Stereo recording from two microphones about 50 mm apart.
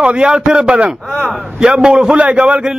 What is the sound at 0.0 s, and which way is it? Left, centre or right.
A man's voice, right.